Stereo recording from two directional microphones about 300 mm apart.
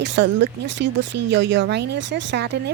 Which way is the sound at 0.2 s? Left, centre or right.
Right.